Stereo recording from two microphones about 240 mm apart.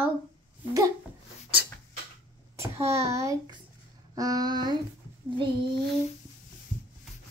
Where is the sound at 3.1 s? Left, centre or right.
Centre.